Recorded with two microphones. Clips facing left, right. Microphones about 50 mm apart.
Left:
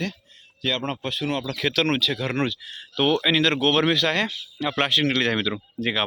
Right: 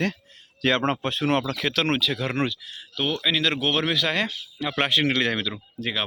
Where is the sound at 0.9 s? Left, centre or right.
Right.